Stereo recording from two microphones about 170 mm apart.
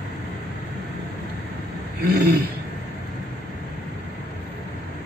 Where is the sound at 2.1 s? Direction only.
65° right (ahead or behind).